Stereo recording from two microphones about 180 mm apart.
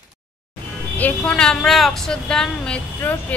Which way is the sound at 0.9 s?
5° left (ahead or behind).